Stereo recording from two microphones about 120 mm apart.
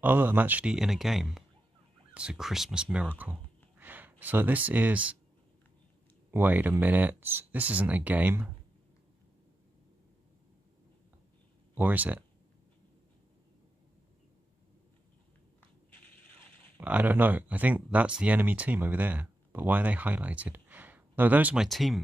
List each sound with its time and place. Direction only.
0.0 s speech: 15° right (ahead or behind)
6.3 s speech: 15° right (ahead or behind)
11.7 s speech: 15° right (ahead or behind)
16.8 s speech: 15° right (ahead or behind)
21.6 s speech: centre (ahead or behind)